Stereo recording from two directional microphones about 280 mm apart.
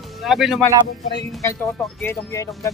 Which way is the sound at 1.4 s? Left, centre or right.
Centre.